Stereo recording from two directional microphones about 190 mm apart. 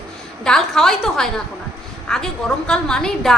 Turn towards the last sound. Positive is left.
turn(degrees=5)  # may be behind; listen again after turning